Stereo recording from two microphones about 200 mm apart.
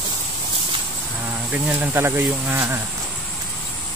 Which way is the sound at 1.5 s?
10° right (ahead or behind).